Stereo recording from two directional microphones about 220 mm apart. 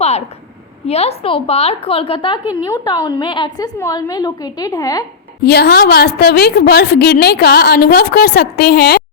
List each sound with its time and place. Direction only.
0.9 s a woman's voice: 30° left (ahead or behind)
5.5 s a woman's voice: 45° left (ahead or behind)